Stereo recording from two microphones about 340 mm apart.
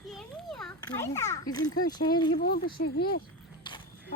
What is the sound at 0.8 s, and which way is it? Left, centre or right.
A child's voice, centre.